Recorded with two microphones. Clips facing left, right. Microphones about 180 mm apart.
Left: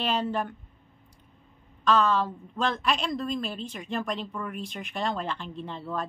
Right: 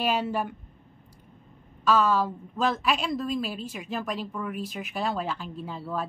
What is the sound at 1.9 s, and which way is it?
A woman's voice, 10° right (ahead or behind).